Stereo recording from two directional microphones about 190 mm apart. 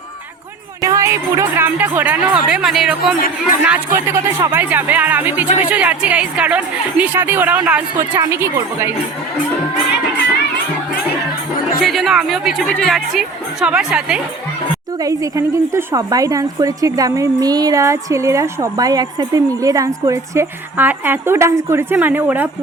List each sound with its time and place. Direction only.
0.8 s a woman's voice: 15° right (ahead or behind)
3.7 s a woman's voice: 15° right (ahead or behind)
11.8 s a woman's voice: centre (ahead or behind)
15.0 s a woman's voice: 15° right (ahead or behind)